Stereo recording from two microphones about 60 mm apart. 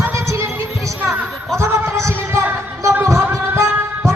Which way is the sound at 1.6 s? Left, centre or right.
Right.